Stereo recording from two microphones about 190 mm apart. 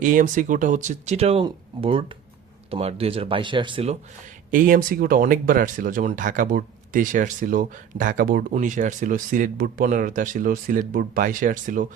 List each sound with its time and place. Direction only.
0.0 s speech: 45° right (ahead or behind); by 3.9 s 30° right (ahead or behind)
4.5 s speech: 45° right (ahead or behind)